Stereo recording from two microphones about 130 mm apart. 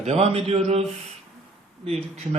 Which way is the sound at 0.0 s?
55° right (ahead or behind).